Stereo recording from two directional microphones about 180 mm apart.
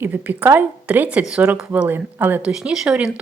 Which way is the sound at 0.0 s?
10° right (ahead or behind).